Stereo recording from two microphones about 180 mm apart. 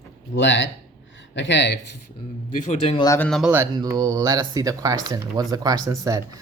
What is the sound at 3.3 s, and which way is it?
Speech, centre (ahead or behind).